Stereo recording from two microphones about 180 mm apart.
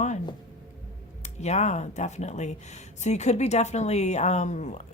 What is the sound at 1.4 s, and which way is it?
Speech, 40° left (ahead or behind).